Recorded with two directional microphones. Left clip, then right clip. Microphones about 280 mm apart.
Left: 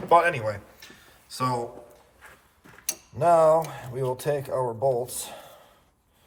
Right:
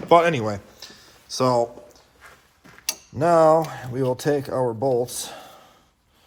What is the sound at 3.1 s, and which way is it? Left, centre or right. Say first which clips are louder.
Cutlery: right 2 dB; right.